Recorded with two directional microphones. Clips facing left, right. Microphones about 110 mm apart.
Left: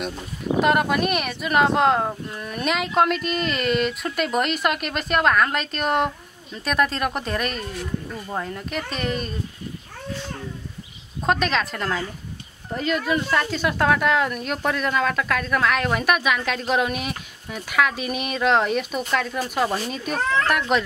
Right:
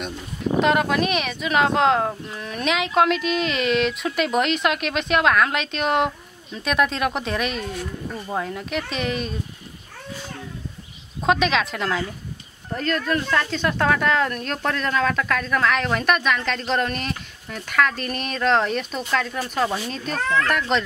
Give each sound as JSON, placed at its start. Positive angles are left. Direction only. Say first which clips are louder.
{"t": 0.6, "sound": "speech", "louder": "even", "side_deg": 5}
{"t": 11.2, "sound": "speech", "louder": "right 2 dB", "side_deg": 0}